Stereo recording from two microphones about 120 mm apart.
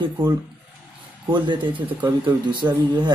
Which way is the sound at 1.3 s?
40° right (ahead or behind).